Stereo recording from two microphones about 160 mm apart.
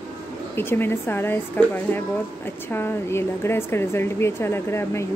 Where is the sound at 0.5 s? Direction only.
15° left (ahead or behind).